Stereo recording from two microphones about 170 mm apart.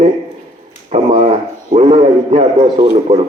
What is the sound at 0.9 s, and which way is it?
A man's voice, 40° right (ahead or behind).